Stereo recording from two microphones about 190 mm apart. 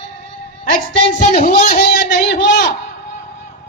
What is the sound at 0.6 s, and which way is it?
Speech, 45° left (ahead or behind).